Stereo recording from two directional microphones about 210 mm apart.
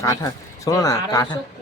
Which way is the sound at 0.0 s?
15° left (ahead or behind).